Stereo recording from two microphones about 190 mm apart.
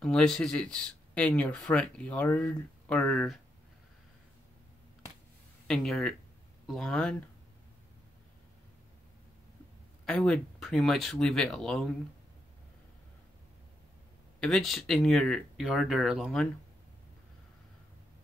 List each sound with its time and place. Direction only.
0.0 s speech: 5° left (ahead or behind)
5.7 s speech: centre (ahead or behind)
10.0 s speech: 5° left (ahead or behind)
14.4 s speech: centre (ahead or behind)